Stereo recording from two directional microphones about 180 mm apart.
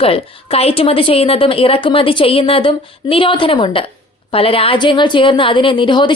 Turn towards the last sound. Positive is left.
turn(degrees=25)  # may be behind; listen again after turning